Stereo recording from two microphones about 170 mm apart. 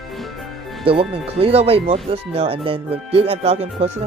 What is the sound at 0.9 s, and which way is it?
Speech, 35° right (ahead or behind).